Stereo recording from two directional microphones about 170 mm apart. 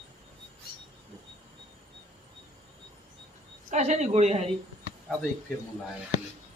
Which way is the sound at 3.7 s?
45° right (ahead or behind).